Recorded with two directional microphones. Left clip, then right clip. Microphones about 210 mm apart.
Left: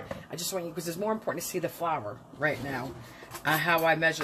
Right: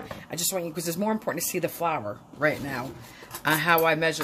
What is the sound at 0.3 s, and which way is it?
Speech, 45° right (ahead or behind).